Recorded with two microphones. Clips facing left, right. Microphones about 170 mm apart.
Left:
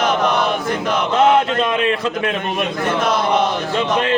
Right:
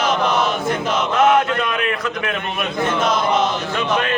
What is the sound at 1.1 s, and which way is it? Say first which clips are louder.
A man's voice: left 1 dB; 25° left (ahead or behind).